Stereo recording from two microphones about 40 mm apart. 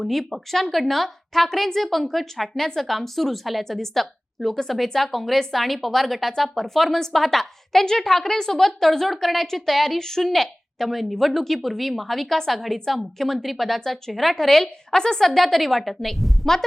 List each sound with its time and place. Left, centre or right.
0.0 s a woman's voice: centre